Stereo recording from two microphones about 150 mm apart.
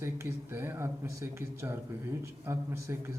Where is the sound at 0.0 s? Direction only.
15° right (ahead or behind).